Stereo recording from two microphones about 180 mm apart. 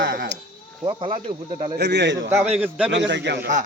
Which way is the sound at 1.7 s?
70° right (ahead or behind).